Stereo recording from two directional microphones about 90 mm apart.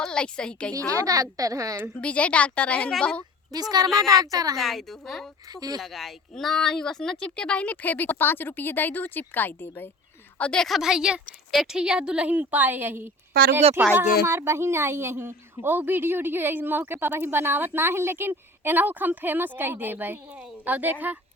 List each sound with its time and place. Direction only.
0.0 s a woman's voice: 10° left (ahead or behind)
0.9 s speech: 40° right (ahead or behind)
2.0 s a woman's voice: 15° left (ahead or behind)
3.5 s a woman's voice: 45° right (ahead or behind)
3.8 s a woman's voice: centre (ahead or behind)
4.2 s a woman's voice: 45° right (ahead or behind)
4.5 s a woman's voice: centre (ahead or behind)
5.5 s a woman's voice: 45° right (ahead or behind)
5.8 s a woman's voice: centre (ahead or behind)
10.7 s a woman's voice: 5° right (ahead or behind)